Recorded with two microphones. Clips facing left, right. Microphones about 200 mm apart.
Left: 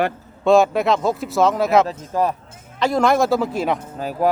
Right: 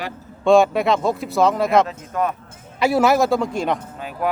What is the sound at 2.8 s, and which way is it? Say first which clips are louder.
Speech: right 1 dB; 10° right (ahead or behind).